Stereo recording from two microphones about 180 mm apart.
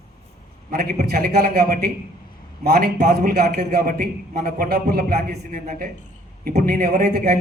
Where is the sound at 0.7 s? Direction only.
60° right (ahead or behind).